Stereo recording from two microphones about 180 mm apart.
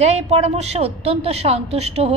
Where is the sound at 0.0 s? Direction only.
35° right (ahead or behind).